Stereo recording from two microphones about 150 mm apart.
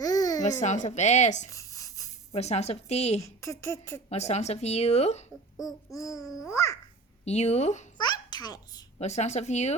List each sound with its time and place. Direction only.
0.0 s babbling: 25° left (ahead or behind)
0.4 s speech: 55° left (ahead or behind)
1.5 s a sound: 20° left (ahead or behind)
2.3 s speech: 45° left (ahead or behind)
3.2 s speech: 20° left (ahead or behind)
4.1 s speech: 45° left (ahead or behind)
5.9 s speech: 20° left (ahead or behind)
7.3 s speech: 45° left (ahead or behind)
7.9 s a child's voice: 30° left (ahead or behind)
9.0 s speech: 50° left (ahead or behind)